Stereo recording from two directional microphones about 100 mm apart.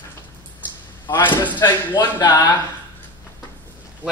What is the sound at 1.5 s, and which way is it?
Speech, 45° left (ahead or behind).